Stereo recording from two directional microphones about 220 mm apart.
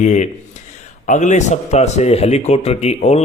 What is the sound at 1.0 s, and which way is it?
Speech, 35° left (ahead or behind).